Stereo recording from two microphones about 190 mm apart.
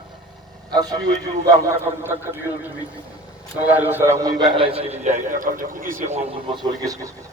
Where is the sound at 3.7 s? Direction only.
10° right (ahead or behind); by 6.2 s 40° right (ahead or behind).